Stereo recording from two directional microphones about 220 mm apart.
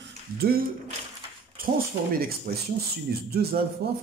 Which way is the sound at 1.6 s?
40° right (ahead or behind).